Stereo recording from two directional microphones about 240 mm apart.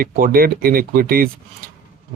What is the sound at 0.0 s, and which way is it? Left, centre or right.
Speech, right.